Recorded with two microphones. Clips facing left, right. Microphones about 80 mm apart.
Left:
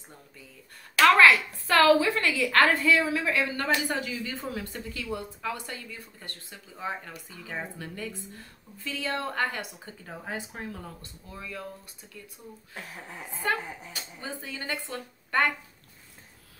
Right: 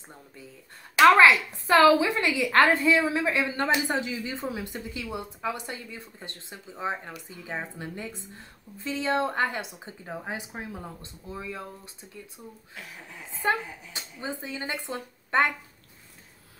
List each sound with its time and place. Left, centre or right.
0.9 s a woman's voice: right
12.7 s speech: left
13.4 s a woman's voice: right